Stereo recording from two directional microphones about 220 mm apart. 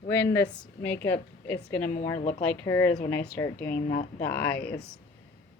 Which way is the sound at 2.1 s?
30° left (ahead or behind).